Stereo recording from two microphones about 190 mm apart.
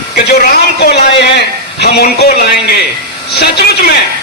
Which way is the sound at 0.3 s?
55° left (ahead or behind).